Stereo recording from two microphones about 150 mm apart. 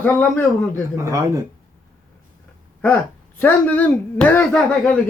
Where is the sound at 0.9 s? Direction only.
20° right (ahead or behind).